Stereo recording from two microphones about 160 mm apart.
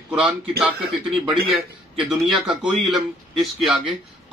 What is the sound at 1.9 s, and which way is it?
A man's voice, centre (ahead or behind).